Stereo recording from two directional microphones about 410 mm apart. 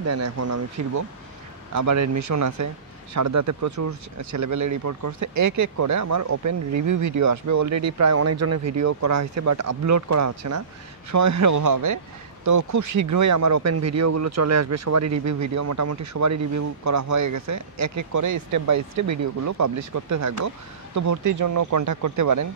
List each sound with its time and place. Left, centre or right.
0.0 s speech: right